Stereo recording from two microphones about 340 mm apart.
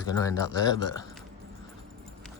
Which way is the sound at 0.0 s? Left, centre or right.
Centre.